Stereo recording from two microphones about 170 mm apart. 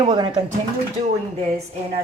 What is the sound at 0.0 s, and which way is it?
Speech, 25° right (ahead or behind).